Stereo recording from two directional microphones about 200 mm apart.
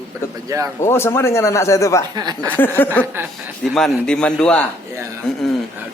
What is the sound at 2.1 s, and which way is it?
Speech, 20° right (ahead or behind).